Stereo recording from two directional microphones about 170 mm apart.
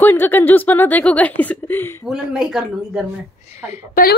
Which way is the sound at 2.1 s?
5° right (ahead or behind).